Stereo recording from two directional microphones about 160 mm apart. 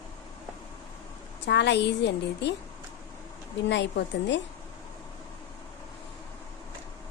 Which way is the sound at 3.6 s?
90° left.